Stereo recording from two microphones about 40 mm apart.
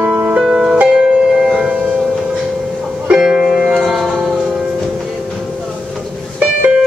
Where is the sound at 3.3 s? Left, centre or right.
Centre.